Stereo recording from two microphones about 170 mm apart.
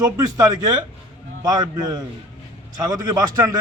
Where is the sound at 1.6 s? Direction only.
25° right (ahead or behind).